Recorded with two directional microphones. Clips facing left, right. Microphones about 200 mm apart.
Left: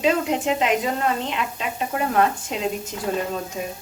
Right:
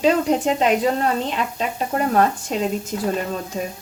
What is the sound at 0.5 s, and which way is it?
Speech, 40° right (ahead or behind).